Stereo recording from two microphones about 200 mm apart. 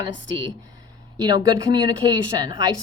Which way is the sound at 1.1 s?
20° right (ahead or behind).